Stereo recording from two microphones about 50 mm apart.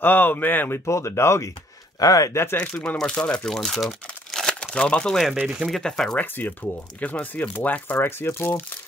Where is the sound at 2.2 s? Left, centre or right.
Left.